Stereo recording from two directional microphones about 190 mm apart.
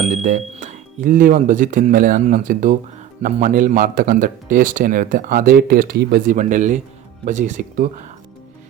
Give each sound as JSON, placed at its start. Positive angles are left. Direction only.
{"t": 0.1, "sound": "a man's voice", "side_deg": -40}